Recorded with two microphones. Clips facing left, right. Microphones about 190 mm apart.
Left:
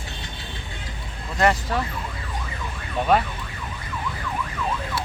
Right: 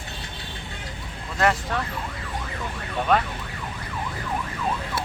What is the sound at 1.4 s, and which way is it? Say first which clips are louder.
Speech: left 2 dB; centre (ahead or behind).